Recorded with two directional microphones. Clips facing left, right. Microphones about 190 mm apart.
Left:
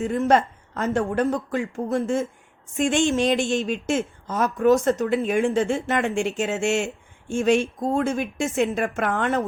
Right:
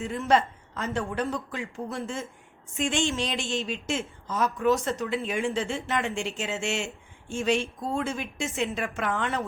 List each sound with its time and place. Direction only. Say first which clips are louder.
0.0 s a woman's voice: left 5 dB; 50° left (ahead or behind)